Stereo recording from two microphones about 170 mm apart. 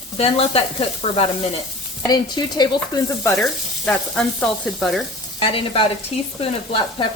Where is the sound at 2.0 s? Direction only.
25° left (ahead or behind).